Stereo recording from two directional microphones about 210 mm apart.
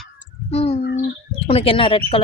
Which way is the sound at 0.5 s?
30° left (ahead or behind).